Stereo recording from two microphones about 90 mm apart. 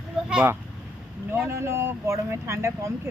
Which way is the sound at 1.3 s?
25° right (ahead or behind).